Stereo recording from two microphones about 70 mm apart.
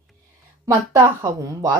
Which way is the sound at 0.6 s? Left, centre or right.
Right.